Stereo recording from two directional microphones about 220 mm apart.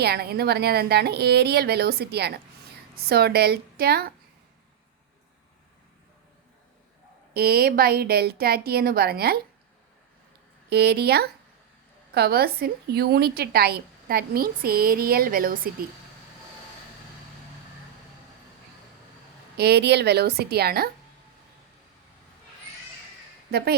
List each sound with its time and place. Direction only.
0.0 s a woman's voice: 45° right (ahead or behind)
7.3 s a woman's voice: 45° right (ahead or behind)
10.7 s a woman's voice: 45° right (ahead or behind)
19.5 s a woman's voice: 50° right (ahead or behind)
23.5 s a woman's voice: 45° right (ahead or behind)